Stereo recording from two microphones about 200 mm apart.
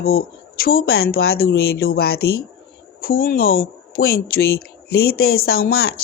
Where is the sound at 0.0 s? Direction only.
50° left (ahead or behind).